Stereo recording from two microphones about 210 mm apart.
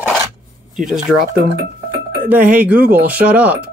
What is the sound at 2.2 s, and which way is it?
Speech, 10° right (ahead or behind).